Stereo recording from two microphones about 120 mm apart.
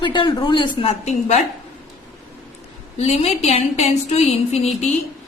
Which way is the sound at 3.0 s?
65° left (ahead or behind).